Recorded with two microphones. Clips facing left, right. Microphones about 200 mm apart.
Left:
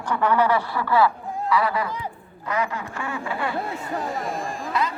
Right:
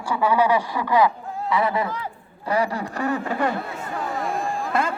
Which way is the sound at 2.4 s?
35° right (ahead or behind).